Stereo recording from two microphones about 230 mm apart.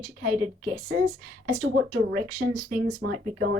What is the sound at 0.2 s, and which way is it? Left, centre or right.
A woman's voice, right.